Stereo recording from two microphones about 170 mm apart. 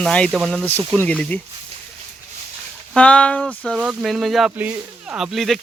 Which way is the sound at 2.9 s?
5° left (ahead or behind).